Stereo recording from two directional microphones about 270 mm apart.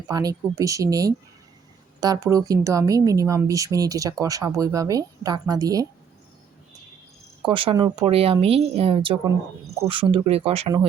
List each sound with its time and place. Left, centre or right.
0.1 s speech: centre
7.4 s speech: centre